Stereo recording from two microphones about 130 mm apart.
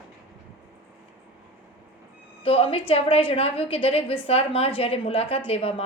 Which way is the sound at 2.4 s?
50° left (ahead or behind).